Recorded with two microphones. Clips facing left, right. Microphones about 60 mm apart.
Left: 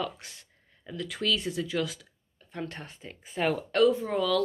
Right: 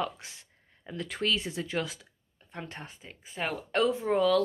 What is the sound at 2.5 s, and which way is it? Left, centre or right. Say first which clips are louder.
Speech: left 4 dB; centre.